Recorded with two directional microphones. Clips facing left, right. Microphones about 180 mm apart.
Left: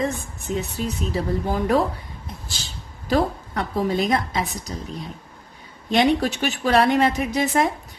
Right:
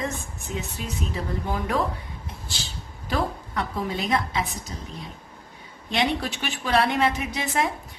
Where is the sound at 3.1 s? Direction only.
35° left (ahead or behind).